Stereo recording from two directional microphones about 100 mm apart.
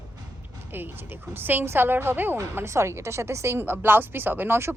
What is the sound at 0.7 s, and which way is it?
Speech, 20° right (ahead or behind).